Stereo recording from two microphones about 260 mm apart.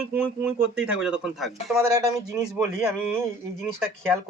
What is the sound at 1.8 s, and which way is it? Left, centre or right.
Speech, centre.